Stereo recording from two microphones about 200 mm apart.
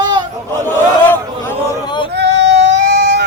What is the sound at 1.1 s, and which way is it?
Speech, 10° left (ahead or behind).